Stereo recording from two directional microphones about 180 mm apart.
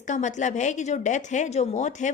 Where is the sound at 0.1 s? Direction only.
45° left (ahead or behind).